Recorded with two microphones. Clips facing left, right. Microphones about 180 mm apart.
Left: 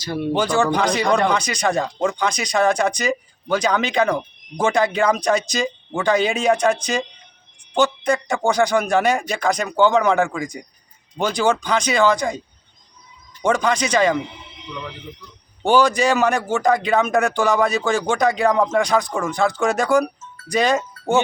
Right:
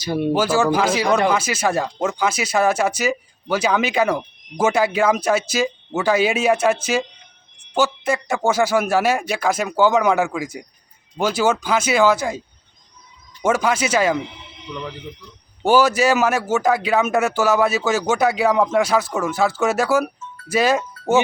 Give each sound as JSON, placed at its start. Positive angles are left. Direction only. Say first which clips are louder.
{"t": 0.0, "sound": "speech", "louder": "right 3 dB", "side_deg": -20}
{"t": 0.3, "sound": "speech", "louder": "even", "side_deg": -5}
{"t": 13.4, "sound": "speech", "louder": "even", "side_deg": -5}
{"t": 15.6, "sound": "speech", "louder": "right 1 dB", "side_deg": -5}